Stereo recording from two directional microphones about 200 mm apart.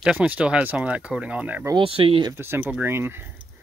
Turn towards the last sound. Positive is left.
turn(degrees=-10)  # may be behind; listen again after turning